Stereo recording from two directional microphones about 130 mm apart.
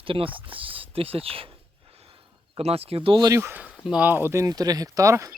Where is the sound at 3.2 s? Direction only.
20° right (ahead or behind).